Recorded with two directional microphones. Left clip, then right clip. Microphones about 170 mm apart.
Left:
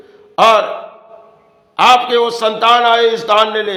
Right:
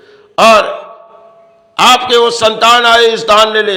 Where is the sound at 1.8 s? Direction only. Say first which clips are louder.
Right 3 dB; 20° right (ahead or behind).